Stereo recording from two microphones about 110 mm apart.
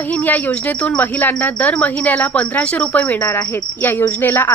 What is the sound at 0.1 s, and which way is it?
Speech, 15° left (ahead or behind).